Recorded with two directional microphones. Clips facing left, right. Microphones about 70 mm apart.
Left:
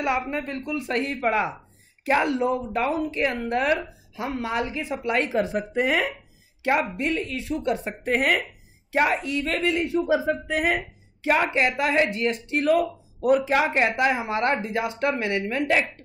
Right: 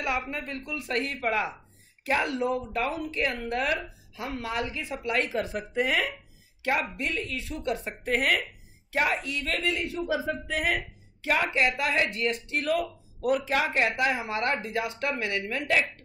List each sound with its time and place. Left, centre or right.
0.3 s speech: left